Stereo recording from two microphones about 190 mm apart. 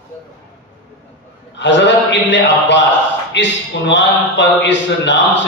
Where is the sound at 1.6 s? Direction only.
70° left (ahead or behind).